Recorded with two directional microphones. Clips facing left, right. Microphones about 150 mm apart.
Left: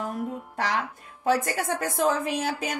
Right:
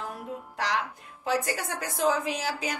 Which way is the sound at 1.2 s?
50° left (ahead or behind).